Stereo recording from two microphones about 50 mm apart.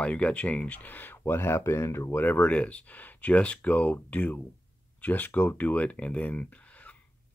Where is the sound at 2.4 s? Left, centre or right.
Left.